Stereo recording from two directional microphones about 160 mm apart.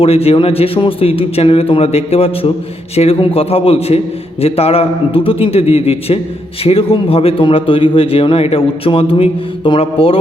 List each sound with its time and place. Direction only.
0.0 s a man's voice: 40° left (ahead or behind)